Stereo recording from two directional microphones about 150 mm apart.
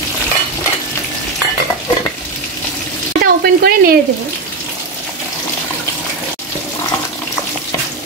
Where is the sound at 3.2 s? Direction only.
90° right.